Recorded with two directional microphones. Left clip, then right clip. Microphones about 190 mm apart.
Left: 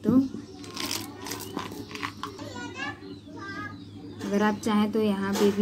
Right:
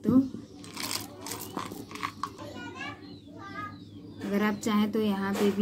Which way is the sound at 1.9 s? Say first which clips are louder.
Even; 20° left (ahead or behind).